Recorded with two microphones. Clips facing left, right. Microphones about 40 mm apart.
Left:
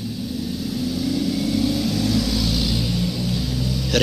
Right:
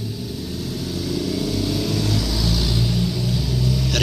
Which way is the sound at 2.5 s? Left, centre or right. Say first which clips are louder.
Left 1 dB; left.